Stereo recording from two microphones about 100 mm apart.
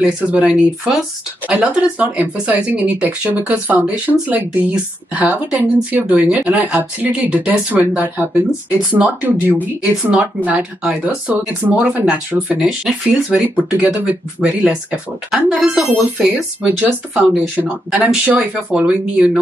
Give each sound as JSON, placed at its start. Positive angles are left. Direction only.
{"t": 0.0, "sound": "speech", "side_deg": -10}